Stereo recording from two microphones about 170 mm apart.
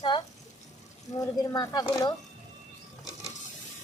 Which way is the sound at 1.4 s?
25° left (ahead or behind).